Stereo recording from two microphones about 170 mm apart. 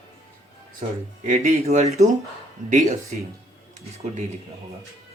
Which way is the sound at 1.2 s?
40° right (ahead or behind).